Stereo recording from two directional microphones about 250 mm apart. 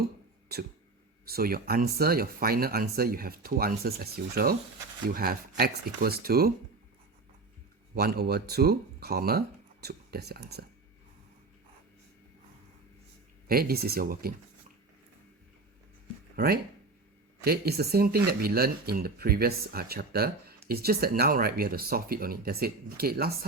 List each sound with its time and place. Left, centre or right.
1.3 s speech: right
7.9 s speech: right
13.5 s speech: right
16.3 s speech: right